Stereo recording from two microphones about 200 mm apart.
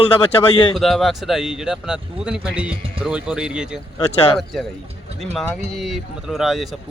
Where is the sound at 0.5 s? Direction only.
25° left (ahead or behind).